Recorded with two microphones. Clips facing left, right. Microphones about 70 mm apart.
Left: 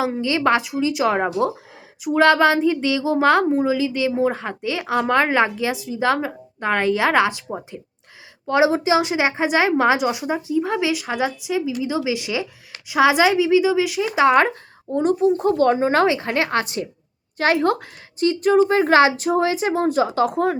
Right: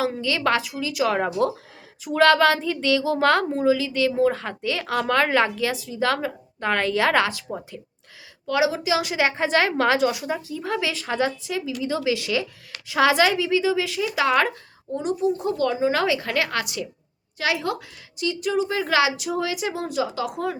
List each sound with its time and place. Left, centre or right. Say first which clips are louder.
0.0 s a child's voice: left 3 dB; left
8.4 s a woman's voice: left 5 dB; left
14.2 s speech: left 6 dB; left